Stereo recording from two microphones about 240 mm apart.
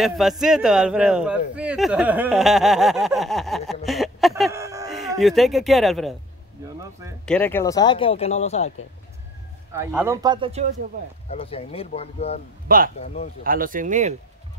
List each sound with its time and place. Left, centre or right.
0.0 s speech: centre
3.8 s a sound: centre
4.5 s a sound: centre
5.2 s speech: centre
6.8 s speech: centre
7.2 s speech: centre; by 8.7 s left
9.7 s speech: centre
11.2 s speech: left
12.6 s speech: right
13.0 s speech: left
13.4 s speech: right